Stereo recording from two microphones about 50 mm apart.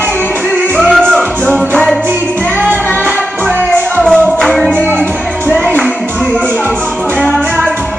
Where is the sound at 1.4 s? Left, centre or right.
Left.